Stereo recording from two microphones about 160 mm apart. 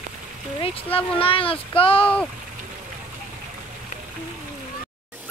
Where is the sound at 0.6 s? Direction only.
35° left (ahead or behind).